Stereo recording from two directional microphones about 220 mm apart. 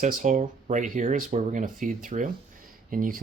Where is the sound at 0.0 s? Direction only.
35° right (ahead or behind).